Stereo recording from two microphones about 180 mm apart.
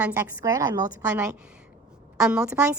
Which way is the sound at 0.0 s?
10° right (ahead or behind).